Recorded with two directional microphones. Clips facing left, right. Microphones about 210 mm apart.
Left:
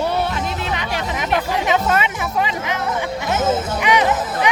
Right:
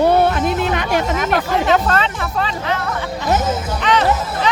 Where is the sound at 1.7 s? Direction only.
10° left (ahead or behind).